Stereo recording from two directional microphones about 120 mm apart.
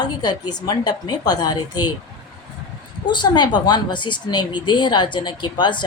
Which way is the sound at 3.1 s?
40° left (ahead or behind).